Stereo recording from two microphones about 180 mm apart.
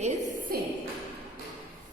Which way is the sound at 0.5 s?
55° right (ahead or behind).